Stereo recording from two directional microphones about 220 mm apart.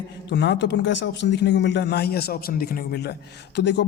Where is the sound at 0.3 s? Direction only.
50° left (ahead or behind).